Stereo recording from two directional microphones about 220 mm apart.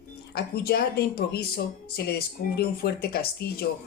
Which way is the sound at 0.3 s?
45° left (ahead or behind).